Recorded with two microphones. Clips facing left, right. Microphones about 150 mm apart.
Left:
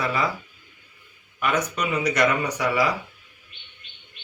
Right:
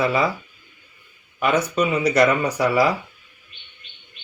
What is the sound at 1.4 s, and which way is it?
Speech, 30° right (ahead or behind).